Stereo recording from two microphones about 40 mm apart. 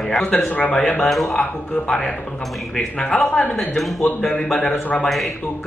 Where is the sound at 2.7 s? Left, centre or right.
Left.